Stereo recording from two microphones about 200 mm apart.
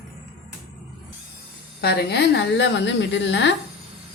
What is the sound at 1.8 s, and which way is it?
A woman's voice, 55° left (ahead or behind).